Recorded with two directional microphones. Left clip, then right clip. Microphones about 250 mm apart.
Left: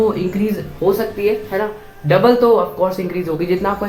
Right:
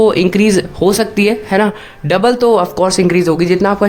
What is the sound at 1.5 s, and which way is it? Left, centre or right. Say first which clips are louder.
Speech: right 7 dB; right.